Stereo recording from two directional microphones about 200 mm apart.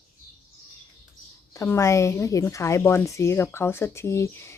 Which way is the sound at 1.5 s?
15° left (ahead or behind).